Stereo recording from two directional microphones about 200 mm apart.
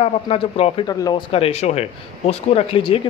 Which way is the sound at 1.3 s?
30° left (ahead or behind).